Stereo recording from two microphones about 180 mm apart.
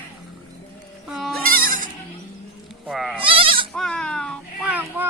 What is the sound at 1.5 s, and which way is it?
Bleat, 50° right (ahead or behind).